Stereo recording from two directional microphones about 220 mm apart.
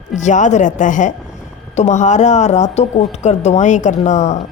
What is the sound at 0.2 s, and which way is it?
Speech, 35° left (ahead or behind).